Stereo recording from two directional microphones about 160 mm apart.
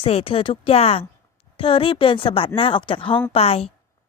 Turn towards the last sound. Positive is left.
turn(degrees=40)  # may be behind; listen again after turning